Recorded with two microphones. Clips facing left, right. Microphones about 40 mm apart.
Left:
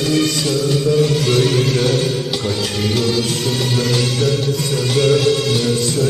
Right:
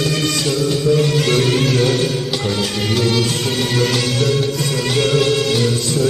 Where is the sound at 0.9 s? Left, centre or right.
Right.